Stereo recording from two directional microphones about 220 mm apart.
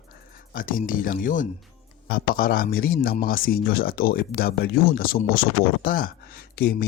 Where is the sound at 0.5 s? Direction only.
40° left (ahead or behind).